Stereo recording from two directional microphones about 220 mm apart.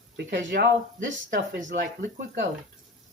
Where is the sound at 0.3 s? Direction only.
50° right (ahead or behind).